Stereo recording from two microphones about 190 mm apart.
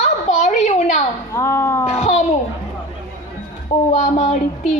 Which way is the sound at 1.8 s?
40° left (ahead or behind).